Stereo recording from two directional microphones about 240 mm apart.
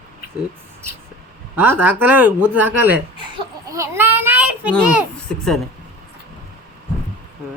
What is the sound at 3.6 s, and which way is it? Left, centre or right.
Child singing, centre.